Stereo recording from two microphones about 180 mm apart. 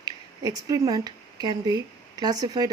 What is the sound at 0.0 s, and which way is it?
Speech, 20° right (ahead or behind).